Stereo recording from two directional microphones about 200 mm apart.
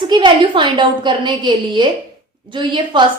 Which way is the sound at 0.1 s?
25° right (ahead or behind).